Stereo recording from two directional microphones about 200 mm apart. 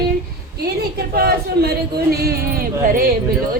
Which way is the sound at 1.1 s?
50° right (ahead or behind).